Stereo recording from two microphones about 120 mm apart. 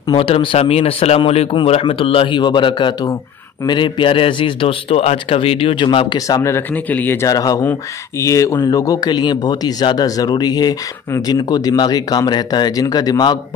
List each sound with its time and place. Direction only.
0.1 s speech: 45° left (ahead or behind)
6.1 s speech: 30° left (ahead or behind)
7.2 s speech: 30° left (ahead or behind)